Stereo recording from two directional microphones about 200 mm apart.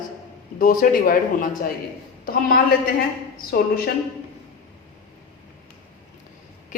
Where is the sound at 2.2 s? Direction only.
45° left (ahead or behind).